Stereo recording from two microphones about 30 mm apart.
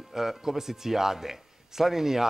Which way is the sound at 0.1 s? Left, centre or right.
Centre.